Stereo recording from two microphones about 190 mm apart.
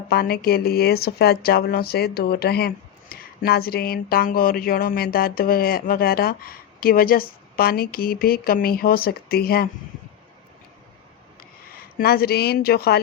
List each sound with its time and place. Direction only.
0.1 s speech: 55° left (ahead or behind)
11.9 s speech: 55° left (ahead or behind)